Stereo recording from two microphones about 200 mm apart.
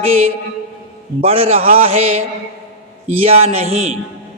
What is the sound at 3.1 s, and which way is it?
Speech, 30° right (ahead or behind).